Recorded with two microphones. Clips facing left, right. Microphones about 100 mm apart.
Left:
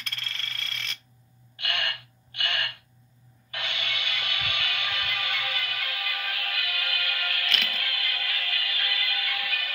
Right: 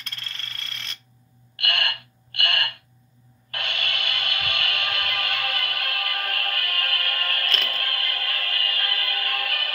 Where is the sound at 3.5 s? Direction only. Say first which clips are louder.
Right 3 dB; 55° right (ahead or behind).